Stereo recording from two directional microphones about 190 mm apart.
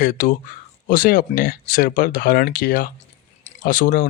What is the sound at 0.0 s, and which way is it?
Speech, 45° left (ahead or behind).